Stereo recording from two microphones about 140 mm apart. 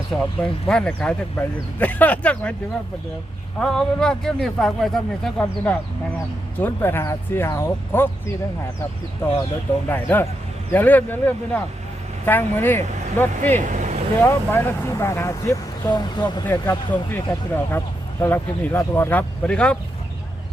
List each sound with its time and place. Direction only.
0.1 s speech: 5° left (ahead or behind)
3.6 s speech: 5° left (ahead or behind)
9.2 s speech: 15° left (ahead or behind)
13.6 s speech: 60° right (ahead or behind)
14.2 s speech: 15° left (ahead or behind); by 16.5 s 30° left (ahead or behind)
16.5 s speech: 15° left (ahead or behind)